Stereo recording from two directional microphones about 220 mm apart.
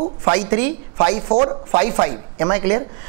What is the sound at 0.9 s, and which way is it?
A woman's voice, 25° right (ahead or behind).